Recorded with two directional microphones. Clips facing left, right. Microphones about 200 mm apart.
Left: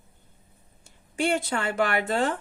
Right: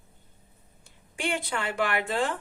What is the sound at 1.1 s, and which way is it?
A woman's voice, 45° left (ahead or behind).